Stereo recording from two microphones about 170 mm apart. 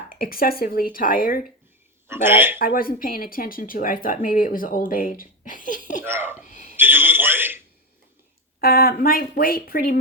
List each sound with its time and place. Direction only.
0.1 s speech: 60° left (ahead or behind)
2.0 s a man's voice: 15° right (ahead or behind)
2.6 s speech: 55° left (ahead or behind)
6.0 s a man's voice: 10° right (ahead or behind)
6.5 s a sound: 50° left (ahead or behind)
6.7 s a man's voice: 10° right (ahead or behind)
8.6 s speech: 60° left (ahead or behind)